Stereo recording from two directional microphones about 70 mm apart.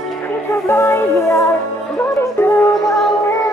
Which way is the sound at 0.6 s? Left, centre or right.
Left.